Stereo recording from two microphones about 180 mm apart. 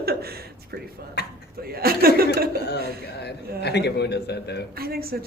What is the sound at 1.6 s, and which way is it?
Speech, 55° right (ahead or behind).